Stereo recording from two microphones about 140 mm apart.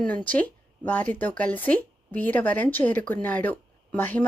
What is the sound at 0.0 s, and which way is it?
A woman's voice, 10° left (ahead or behind).